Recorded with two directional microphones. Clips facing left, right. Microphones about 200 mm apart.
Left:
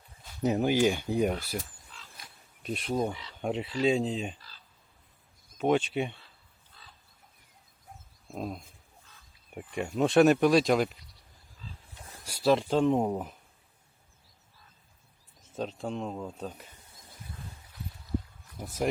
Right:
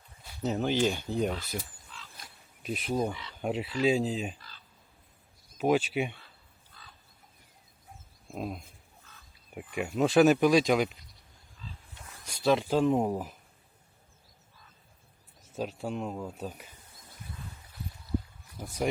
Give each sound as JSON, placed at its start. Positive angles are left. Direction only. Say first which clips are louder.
{"t": 0.4, "sound": "speech", "louder": "left 3 dB", "side_deg": 10}
{"t": 2.1, "sound": "a sound", "louder": "right 1 dB", "side_deg": 0}
{"t": 3.1, "sound": "speech", "louder": "even", "side_deg": 35}
{"t": 3.4, "sound": "speech", "louder": "even", "side_deg": -5}
{"t": 5.5, "sound": "speech", "louder": "even", "side_deg": -5}
{"t": 6.8, "sound": "chicken", "louder": "right 1 dB", "side_deg": 25}
{"t": 8.3, "sound": "speech", "louder": "even", "side_deg": 0}
{"t": 12.2, "sound": "speech", "louder": "left 1 dB", "side_deg": 5}
{"t": 15.5, "sound": "speech", "louder": "even", "side_deg": -5}
{"t": 18.6, "sound": "speech", "louder": "left 1 dB", "side_deg": 0}